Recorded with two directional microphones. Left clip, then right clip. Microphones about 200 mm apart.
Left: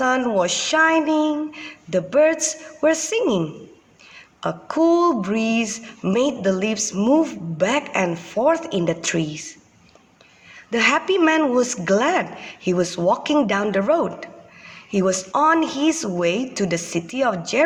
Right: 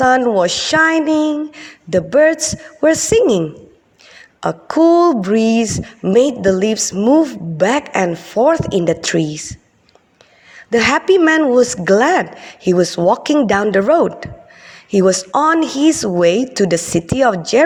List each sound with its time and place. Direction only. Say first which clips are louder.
0.0 s a woman's voice: right 7 dB; 30° right (ahead or behind)
10.7 s a woman's voice: right 6 dB; 35° right (ahead or behind)